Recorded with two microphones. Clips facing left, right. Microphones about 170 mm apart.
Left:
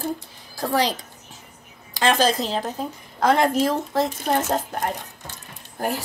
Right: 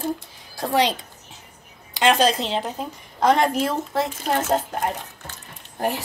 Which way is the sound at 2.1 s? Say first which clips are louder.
Right 1 dB; 35° left (ahead or behind).